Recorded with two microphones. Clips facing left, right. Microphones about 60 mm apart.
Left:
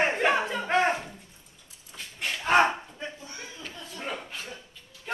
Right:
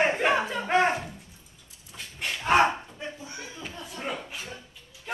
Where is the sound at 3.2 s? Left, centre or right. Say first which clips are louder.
Right 2 dB; centre.